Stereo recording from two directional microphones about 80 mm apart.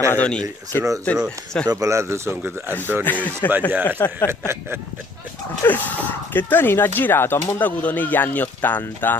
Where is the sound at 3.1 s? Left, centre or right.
Right.